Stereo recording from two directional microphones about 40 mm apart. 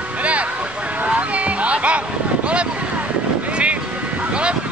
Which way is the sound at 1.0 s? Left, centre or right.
Right.